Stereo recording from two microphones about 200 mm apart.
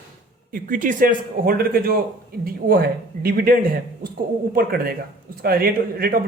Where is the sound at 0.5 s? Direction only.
40° right (ahead or behind).